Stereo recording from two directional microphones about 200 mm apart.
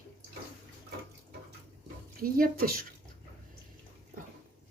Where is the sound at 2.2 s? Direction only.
45° right (ahead or behind).